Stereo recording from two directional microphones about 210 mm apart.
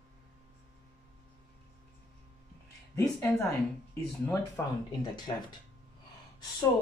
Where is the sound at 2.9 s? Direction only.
15° left (ahead or behind).